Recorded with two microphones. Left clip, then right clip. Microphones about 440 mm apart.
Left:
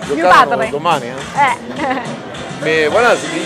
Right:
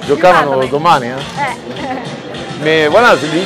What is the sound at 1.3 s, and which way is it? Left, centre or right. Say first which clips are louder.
Speech: left 8 dB; left.